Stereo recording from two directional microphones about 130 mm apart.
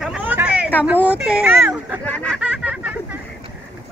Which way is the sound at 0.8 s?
10° right (ahead or behind).